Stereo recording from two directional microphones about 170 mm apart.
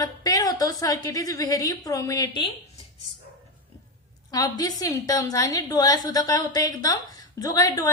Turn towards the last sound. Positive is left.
turn(degrees=20)  # may be behind; listen again after turning